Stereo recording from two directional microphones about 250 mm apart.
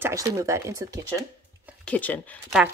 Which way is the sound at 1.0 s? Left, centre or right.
Centre.